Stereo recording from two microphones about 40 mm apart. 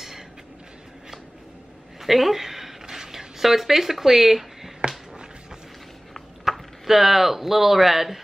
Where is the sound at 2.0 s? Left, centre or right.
Centre.